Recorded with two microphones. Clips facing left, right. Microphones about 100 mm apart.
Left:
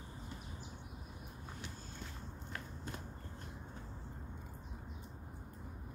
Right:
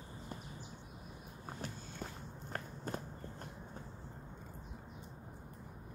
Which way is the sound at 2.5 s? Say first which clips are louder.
Right 5 dB; 40° right (ahead or behind).